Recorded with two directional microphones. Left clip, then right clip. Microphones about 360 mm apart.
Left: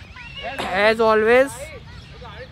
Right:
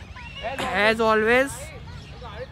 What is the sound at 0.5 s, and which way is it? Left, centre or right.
Speech, centre.